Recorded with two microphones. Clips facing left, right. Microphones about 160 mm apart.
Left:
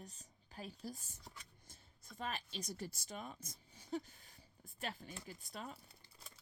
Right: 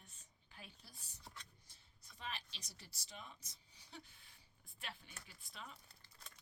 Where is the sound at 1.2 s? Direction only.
10° left (ahead or behind).